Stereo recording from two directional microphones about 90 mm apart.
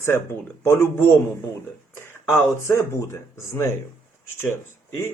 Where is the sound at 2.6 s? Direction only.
30° left (ahead or behind).